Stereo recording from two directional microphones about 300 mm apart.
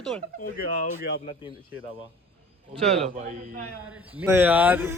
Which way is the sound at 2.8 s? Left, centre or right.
Right.